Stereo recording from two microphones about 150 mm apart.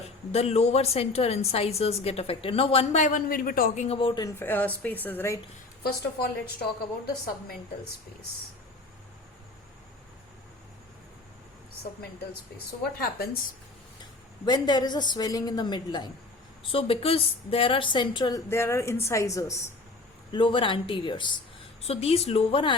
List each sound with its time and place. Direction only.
0.3 s a woman's voice: 45° left (ahead or behind); by 3.7 s 75° left (ahead or behind)
3.8 s a woman's voice: 45° left (ahead or behind)
4.4 s a woman's voice: 15° left (ahead or behind)
5.8 s a woman's voice: 90° left
12.8 s a woman's voice: 90° left
14.4 s a woman's voice: 30° left (ahead or behind)
20.3 s speech: 35° left (ahead or behind)